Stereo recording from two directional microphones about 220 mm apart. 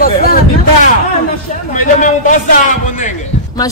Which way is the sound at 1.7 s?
35° left (ahead or behind).